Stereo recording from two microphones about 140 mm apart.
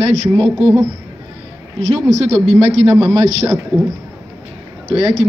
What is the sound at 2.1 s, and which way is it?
Speech, 50° right (ahead or behind).